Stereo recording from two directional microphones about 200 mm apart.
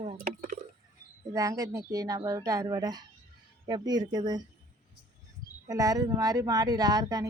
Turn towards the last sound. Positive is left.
turn(degrees=-20)  # may be behind; listen again after turning